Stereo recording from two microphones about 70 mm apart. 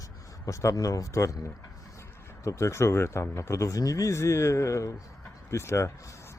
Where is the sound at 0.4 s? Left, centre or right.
Left.